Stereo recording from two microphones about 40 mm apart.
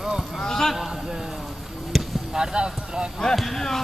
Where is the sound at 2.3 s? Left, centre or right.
Centre.